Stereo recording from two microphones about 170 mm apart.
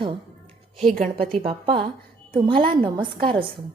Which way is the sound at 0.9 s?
55° right (ahead or behind).